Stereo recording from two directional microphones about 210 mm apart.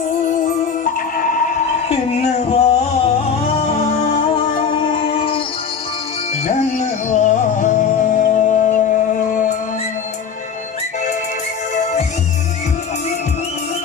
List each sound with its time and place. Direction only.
0.2 s music: 40° left (ahead or behind)
4.4 s music: 25° left (ahead or behind)
6.4 s music: 35° left (ahead or behind)
11.7 s music: 35° left (ahead or behind)